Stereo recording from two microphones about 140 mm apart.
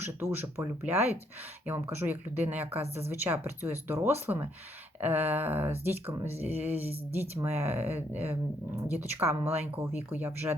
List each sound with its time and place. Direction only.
0.0 s speech: 15° right (ahead or behind)